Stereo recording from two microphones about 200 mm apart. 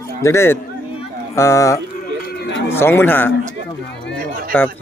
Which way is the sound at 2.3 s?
60° left (ahead or behind).